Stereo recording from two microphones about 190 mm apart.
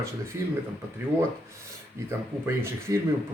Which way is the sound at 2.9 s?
20° right (ahead or behind).